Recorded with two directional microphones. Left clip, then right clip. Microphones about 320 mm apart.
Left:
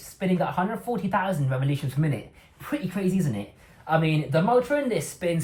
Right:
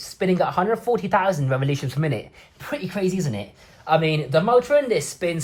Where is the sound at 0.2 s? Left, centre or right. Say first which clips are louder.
Right 5 dB; centre.